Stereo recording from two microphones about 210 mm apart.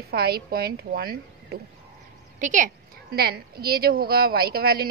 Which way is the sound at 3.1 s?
45° right (ahead or behind).